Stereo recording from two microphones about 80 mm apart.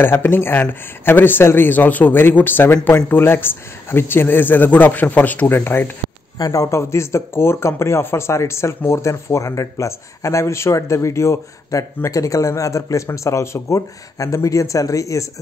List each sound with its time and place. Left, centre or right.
0.0 s speech: left
6.3 s speech: left